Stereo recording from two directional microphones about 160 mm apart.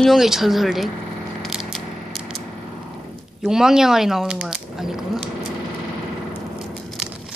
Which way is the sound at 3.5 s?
5° right (ahead or behind).